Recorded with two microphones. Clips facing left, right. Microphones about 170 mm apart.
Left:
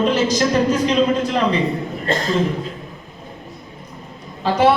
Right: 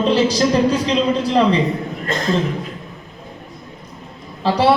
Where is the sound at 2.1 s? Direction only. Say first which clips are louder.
Left 3 dB; 30° left (ahead or behind).